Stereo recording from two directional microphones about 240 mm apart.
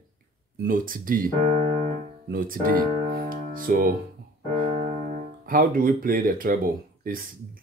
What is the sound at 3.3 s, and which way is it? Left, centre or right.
Music, right.